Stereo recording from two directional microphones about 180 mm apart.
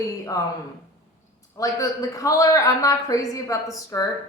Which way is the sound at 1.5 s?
20° left (ahead or behind).